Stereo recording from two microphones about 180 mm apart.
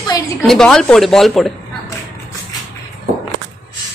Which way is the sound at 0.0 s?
25° left (ahead or behind).